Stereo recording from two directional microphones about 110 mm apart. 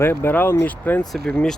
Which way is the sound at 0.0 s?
20° left (ahead or behind).